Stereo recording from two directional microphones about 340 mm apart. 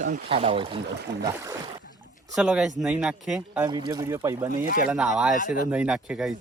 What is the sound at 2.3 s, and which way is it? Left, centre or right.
Speech, centre.